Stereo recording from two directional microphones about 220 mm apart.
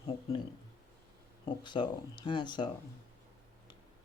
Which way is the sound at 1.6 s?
20° left (ahead or behind).